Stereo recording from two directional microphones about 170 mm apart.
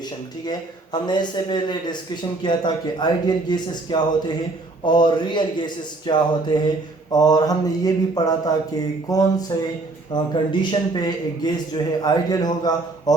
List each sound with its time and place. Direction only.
1.0 s a man's voice: 25° left (ahead or behind)